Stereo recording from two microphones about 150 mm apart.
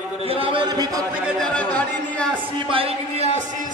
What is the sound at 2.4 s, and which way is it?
Speech, 35° right (ahead or behind).